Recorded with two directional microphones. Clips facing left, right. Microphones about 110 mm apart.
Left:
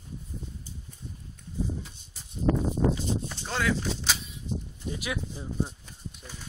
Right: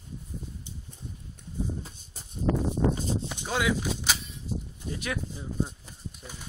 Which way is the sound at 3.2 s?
15° right (ahead or behind).